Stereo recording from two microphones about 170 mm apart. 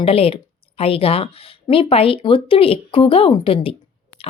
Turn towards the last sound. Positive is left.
turn(degrees=35)  # may be behind; listen again after turning